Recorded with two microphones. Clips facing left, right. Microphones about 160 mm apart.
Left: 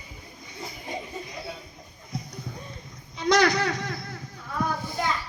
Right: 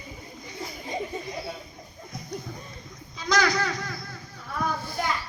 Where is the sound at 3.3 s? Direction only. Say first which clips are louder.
Left 3 dB; 25° left (ahead or behind).